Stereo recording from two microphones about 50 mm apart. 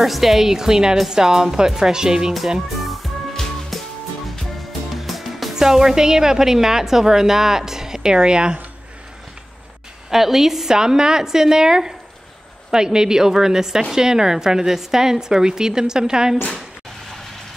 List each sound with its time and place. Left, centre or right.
0.0 s a woman's voice: centre
2.8 s music: centre
4.9 s a woman's voice: centre
10.1 s a woman's voice: centre